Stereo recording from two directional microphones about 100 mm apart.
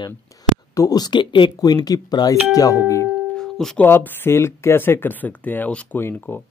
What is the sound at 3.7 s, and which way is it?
Speech, 25° left (ahead or behind).